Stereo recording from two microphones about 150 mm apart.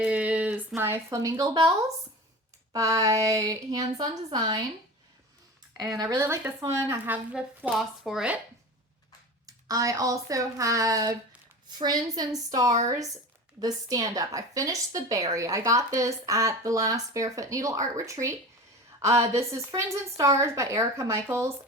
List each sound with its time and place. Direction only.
0.0 s a sound: 10° right (ahead or behind)
0.8 s a woman's voice: 15° right (ahead or behind)
2.7 s a woman's voice: 20° right (ahead or behind)
6.0 s a woman's voice: 20° right (ahead or behind); by 8.4 s 5° right (ahead or behind)
9.5 s a woman's voice: 25° right (ahead or behind)
19.4 s a woman's voice: 20° right (ahead or behind)